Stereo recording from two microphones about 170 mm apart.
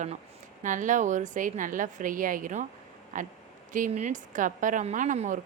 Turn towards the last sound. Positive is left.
turn(degrees=-50)  # may be behind; listen again after turning